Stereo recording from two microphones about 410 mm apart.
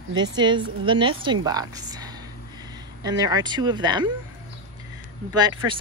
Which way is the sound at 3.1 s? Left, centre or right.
Centre.